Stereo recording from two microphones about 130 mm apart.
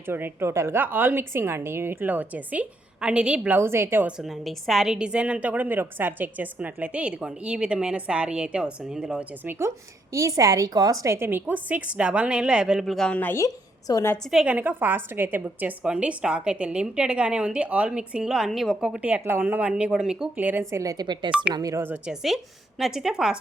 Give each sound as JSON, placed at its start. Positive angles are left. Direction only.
{"t": 0.1, "sound": "a woman's voice", "side_deg": -15}
{"t": 4.2, "sound": "a woman's voice", "side_deg": 0}
{"t": 14.3, "sound": "a woman's voice", "side_deg": -5}
{"t": 21.2, "sound": "a woman's voice", "side_deg": -10}
{"t": 21.5, "sound": "speech", "side_deg": -25}
{"t": 21.8, "sound": "a woman's voice", "side_deg": -5}